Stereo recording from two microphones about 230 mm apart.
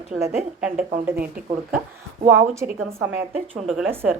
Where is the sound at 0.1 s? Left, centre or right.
Centre.